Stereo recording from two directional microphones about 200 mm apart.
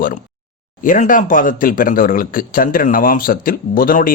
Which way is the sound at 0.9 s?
40° left (ahead or behind).